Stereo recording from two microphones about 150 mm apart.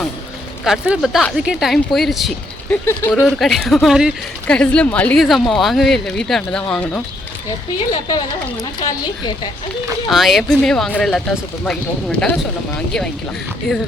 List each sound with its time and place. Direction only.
0.6 s speech: 5° right (ahead or behind)
2.8 s speech: 15° left (ahead or behind)
3.2 s speech: centre (ahead or behind)
4.4 s speech: 5° left (ahead or behind)
8.9 s speech: 30° left (ahead or behind)
10.1 s speech: centre (ahead or behind)